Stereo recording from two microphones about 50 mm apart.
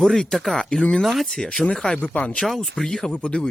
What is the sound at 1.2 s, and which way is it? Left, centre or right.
Speech, centre.